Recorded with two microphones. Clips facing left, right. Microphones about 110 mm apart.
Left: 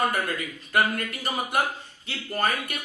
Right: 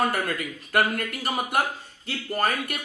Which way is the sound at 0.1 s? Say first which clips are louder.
Right 1 dB; 50° right (ahead or behind).